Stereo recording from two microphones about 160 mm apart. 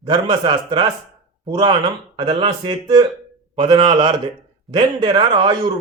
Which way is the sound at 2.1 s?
30° right (ahead or behind).